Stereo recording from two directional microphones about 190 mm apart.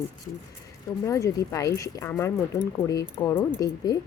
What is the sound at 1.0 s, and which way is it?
Speech, 15° left (ahead or behind).